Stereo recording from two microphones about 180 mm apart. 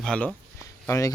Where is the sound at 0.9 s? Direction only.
20° left (ahead or behind).